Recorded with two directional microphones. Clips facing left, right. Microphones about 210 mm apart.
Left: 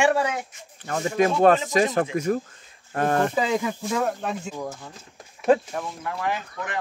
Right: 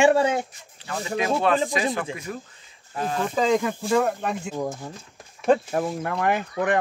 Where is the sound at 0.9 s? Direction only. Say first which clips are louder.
Left 3 dB; 45° left (ahead or behind).